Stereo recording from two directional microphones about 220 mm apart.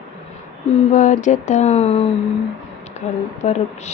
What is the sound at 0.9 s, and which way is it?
Speech, 35° left (ahead or behind).